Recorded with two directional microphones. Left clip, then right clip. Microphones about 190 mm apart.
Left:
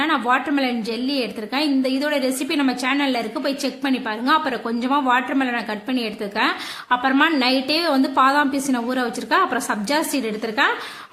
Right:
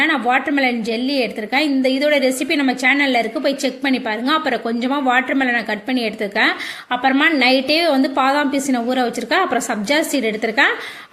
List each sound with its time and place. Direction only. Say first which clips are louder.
0.0 s a woman's voice: right 3 dB; 10° right (ahead or behind)